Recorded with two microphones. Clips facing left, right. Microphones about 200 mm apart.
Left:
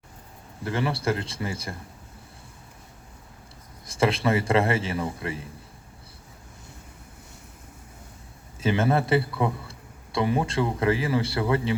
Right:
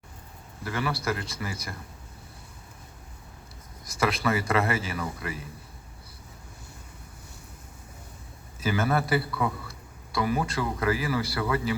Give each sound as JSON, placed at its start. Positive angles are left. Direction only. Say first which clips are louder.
{"t": 0.6, "sound": "a man's voice", "louder": "left 3 dB", "side_deg": 25}
{"t": 3.8, "sound": "a man's voice", "louder": "left 3 dB", "side_deg": 30}
{"t": 8.6, "sound": "a man's voice", "louder": "left 3 dB", "side_deg": 25}